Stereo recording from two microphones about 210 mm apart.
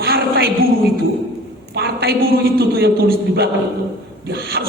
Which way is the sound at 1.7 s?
50° right (ahead or behind).